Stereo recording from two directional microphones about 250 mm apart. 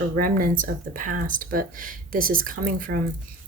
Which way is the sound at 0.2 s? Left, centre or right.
Right.